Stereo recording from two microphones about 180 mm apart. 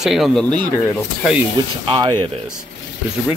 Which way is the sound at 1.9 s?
25° right (ahead or behind).